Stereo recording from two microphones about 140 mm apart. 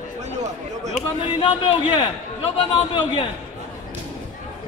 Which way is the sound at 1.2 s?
40° left (ahead or behind).